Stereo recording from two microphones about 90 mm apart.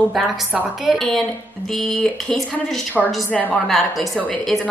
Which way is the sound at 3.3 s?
15° left (ahead or behind).